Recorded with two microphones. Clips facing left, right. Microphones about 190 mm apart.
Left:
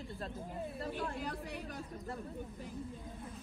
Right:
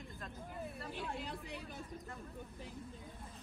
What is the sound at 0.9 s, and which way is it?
Speech, 60° left (ahead or behind).